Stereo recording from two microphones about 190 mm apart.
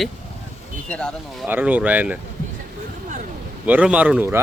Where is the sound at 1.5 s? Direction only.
10° right (ahead or behind).